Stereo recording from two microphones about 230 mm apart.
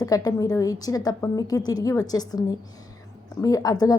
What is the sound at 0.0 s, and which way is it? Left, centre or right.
A woman's voice, centre.